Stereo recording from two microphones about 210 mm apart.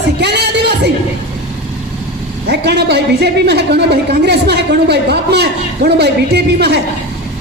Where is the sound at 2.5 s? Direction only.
50° right (ahead or behind).